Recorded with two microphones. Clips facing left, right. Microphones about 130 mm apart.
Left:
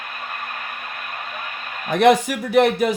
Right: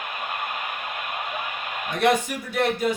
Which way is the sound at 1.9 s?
75° left (ahead or behind).